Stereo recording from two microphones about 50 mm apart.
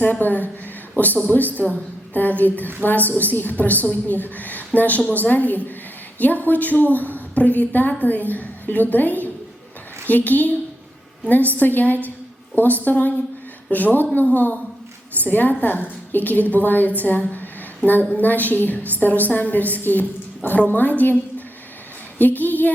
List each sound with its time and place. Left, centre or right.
0.0 s a woman's voice: left